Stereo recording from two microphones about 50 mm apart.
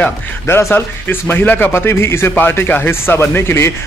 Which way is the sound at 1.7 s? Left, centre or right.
Left.